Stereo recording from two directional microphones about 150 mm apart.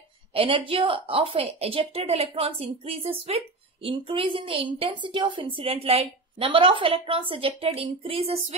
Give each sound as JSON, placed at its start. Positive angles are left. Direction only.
{"t": 0.3, "sound": "a woman's voice", "side_deg": -35}